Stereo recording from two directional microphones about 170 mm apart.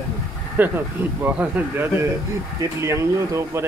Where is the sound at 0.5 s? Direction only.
10° right (ahead or behind).